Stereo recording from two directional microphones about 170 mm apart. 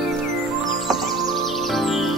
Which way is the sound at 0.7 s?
Centre (ahead or behind).